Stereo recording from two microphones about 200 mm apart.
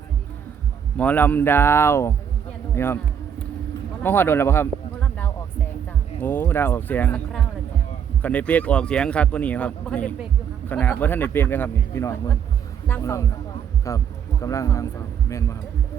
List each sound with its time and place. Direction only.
0.9 s speech: 10° left (ahead or behind)
2.7 s a sound: 10° left (ahead or behind)
4.0 s speech: 10° left (ahead or behind)
6.2 s speech: 10° left (ahead or behind)